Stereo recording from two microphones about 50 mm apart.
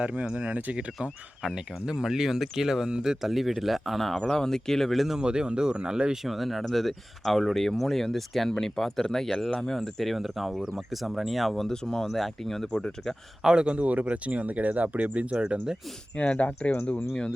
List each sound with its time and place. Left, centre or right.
0.0 s speech: right
1.5 s speech: centre
4.2 s speech: centre
5.2 s speech: centre
6.2 s speech: centre
13.4 s speech: centre
16.1 s speech: left